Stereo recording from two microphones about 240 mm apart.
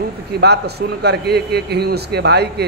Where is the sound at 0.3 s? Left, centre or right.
Right.